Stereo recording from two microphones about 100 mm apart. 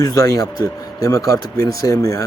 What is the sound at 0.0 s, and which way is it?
Speech, 35° left (ahead or behind).